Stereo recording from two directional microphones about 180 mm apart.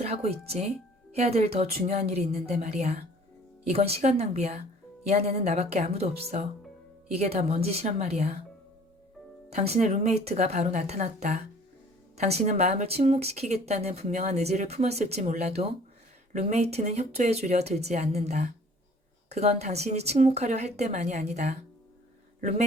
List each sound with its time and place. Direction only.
0.0 s speech: 35° right (ahead or behind)
9.5 s speech: 40° right (ahead or behind)